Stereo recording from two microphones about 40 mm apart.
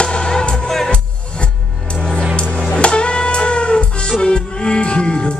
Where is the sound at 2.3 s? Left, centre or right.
Left.